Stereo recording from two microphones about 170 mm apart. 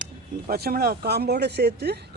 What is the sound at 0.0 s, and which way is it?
Speech, 55° right (ahead or behind).